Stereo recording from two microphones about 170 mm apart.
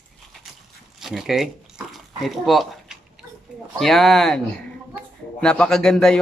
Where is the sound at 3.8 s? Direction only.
Centre (ahead or behind).